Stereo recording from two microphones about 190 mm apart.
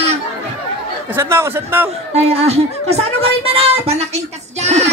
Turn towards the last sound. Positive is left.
turn(degrees=-35)  # may be behind; listen again after turning